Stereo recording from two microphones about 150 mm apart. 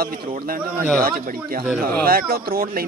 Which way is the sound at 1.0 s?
75° right (ahead or behind).